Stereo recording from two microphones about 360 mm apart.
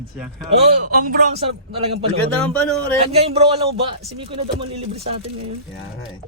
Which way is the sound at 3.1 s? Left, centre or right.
Centre.